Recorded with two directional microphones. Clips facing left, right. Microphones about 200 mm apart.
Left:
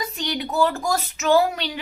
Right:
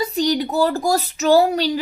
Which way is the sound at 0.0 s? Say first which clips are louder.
Right 8 dB; 35° right (ahead or behind).